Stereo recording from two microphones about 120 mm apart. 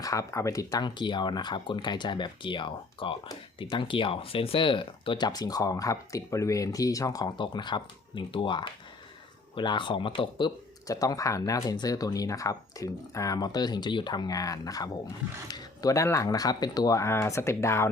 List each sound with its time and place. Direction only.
0.0 s speech: 25° left (ahead or behind); by 10.5 s 45° left (ahead or behind)
10.8 s speech: 30° left (ahead or behind)